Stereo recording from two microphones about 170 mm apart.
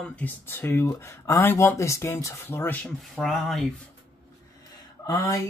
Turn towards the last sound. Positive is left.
turn(degrees=20)  # may be behind; listen again after turning